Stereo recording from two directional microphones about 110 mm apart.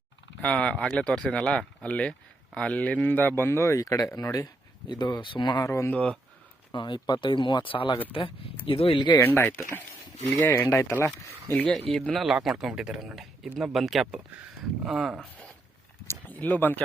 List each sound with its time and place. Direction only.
0.4 s speech: 10° left (ahead or behind); by 5.6 s 45° left (ahead or behind)
5.6 s speech: 30° left (ahead or behind)
5.9 s speech: 10° left (ahead or behind)
6.7 s speech: 45° left (ahead or behind)
9.1 s speech: 15° left (ahead or behind)
11.5 s a man's voice: 10° left (ahead or behind)
16.0 s a sound: 15° left (ahead or behind)